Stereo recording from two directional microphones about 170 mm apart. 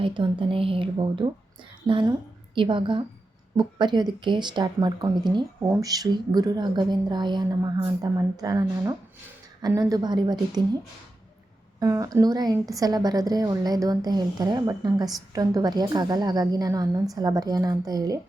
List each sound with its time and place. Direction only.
0.0 s a woman's voice: 30° right (ahead or behind)
2.6 s a woman's voice: 30° right (ahead or behind)
11.8 s a woman's voice: 20° right (ahead or behind)